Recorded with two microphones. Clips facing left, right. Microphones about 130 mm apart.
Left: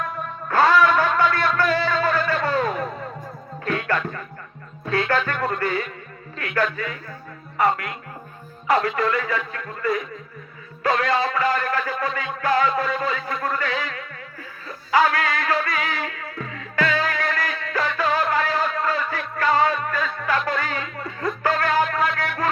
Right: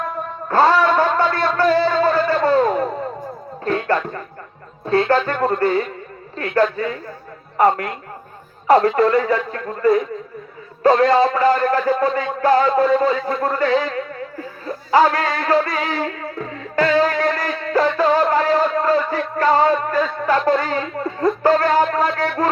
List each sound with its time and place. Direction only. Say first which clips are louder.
0.0 s music: right 3 dB; 30° right (ahead or behind)
6.3 s a man's voice: right 6 dB; 30° right (ahead or behind)